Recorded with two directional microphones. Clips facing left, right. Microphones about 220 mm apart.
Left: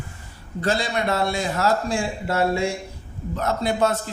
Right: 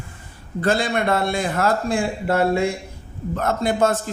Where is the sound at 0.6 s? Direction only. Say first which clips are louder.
Right 3 dB; 55° right (ahead or behind).